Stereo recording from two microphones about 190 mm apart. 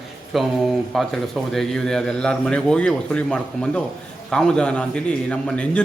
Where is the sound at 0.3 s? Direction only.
Centre (ahead or behind).